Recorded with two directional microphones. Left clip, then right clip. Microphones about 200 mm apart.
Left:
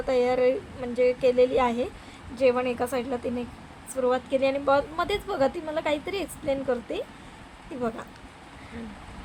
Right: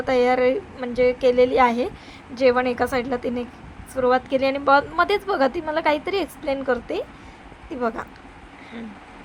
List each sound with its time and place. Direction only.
0.0 s a woman's voice: 15° right (ahead or behind)